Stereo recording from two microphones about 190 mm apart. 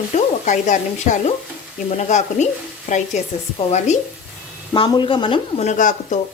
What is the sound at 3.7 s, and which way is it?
Speech, 35° left (ahead or behind).